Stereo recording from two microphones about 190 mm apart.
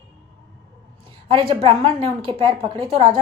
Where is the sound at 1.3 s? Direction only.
25° right (ahead or behind).